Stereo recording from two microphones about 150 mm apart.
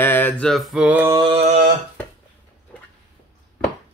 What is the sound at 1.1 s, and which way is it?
Mantra, 30° right (ahead or behind).